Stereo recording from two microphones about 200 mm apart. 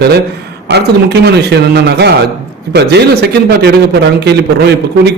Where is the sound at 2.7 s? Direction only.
55° right (ahead or behind).